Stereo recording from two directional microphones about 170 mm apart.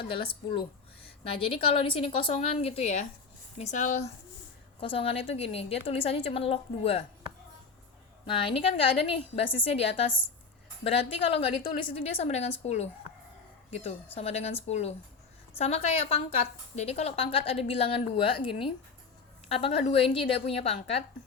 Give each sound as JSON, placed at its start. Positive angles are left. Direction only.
{"t": 1.2, "sound": "a woman's voice", "side_deg": 35}
{"t": 4.8, "sound": "a woman's voice", "side_deg": 30}
{"t": 8.3, "sound": "a woman's voice", "side_deg": 30}
{"t": 19.5, "sound": "a woman's voice", "side_deg": 35}